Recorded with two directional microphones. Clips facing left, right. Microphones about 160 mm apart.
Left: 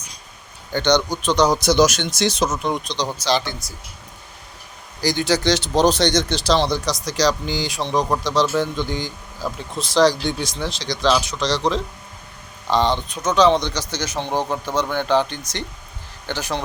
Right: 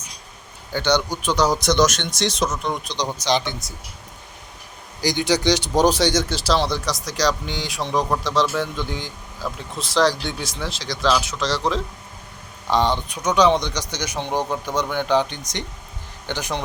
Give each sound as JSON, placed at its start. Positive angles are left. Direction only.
{"t": 0.7, "sound": "speech", "side_deg": -10}
{"t": 2.8, "sound": "speech", "side_deg": -15}
{"t": 4.9, "sound": "speech", "side_deg": -15}
{"t": 14.2, "sound": "speech", "side_deg": 15}
{"t": 14.8, "sound": "speech", "side_deg": -15}